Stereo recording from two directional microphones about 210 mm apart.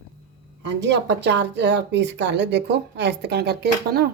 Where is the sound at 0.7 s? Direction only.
55° right (ahead or behind).